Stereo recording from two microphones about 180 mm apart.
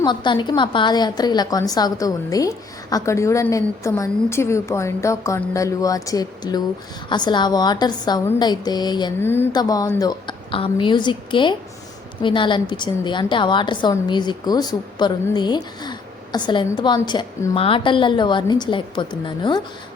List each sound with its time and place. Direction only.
0.0 s a woman's voice: 25° left (ahead or behind)
9.2 s a woman's voice: 10° left (ahead or behind)